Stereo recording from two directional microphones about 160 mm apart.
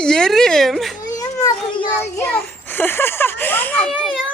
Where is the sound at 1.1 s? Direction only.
20° left (ahead or behind).